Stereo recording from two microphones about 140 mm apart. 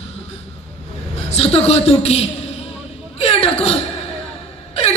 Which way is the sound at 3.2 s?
45° left (ahead or behind).